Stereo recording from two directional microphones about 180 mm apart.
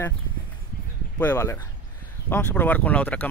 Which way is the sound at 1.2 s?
10° left (ahead or behind).